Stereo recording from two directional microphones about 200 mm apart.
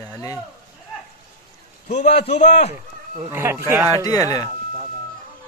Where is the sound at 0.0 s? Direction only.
15° left (ahead or behind).